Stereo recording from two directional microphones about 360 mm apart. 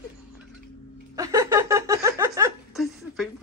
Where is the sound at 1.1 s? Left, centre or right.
Centre.